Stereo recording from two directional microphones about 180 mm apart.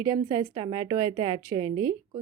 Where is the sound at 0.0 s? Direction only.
20° right (ahead or behind).